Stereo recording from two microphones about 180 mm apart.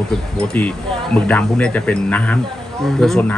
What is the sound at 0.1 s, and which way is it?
Speech, 5° left (ahead or behind).